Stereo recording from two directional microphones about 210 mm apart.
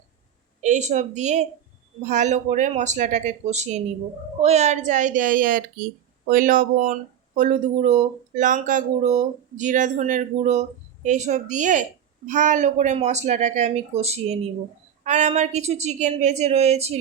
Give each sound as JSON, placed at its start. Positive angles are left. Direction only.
{"t": 0.6, "sound": "speech", "side_deg": -35}